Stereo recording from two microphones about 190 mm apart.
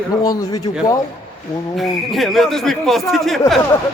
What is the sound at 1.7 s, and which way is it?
Speech, centre (ahead or behind).